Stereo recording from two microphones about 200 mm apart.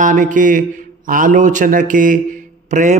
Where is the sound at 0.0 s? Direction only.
40° right (ahead or behind).